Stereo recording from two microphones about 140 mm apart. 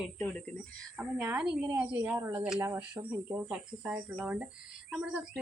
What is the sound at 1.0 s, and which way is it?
A woman's voice, 10° right (ahead or behind).